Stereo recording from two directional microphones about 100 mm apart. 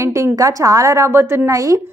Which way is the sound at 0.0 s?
30° right (ahead or behind).